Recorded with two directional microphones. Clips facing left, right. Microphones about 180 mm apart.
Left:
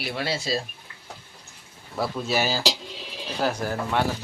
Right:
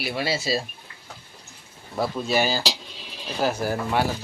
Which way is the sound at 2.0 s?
Centre (ahead or behind).